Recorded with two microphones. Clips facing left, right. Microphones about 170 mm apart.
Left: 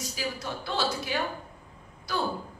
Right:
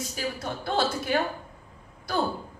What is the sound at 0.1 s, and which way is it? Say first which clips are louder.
A woman's voice: even; 50° right (ahead or behind).